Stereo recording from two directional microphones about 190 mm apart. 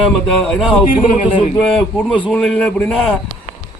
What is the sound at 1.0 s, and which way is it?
Speech, 25° left (ahead or behind).